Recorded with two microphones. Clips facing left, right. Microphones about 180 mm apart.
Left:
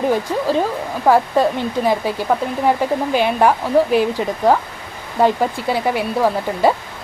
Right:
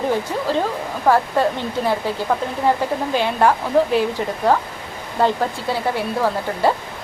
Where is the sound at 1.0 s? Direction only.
15° left (ahead or behind).